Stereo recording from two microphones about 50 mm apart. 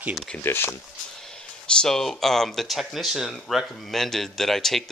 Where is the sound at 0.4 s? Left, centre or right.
Left.